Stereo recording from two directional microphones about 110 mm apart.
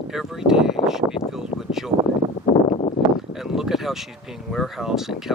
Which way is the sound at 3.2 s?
5° right (ahead or behind).